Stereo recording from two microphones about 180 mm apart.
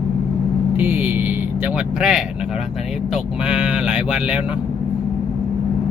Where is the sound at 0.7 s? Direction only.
10° right (ahead or behind).